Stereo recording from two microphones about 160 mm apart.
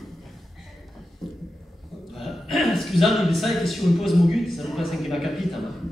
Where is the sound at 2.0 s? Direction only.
Centre (ahead or behind).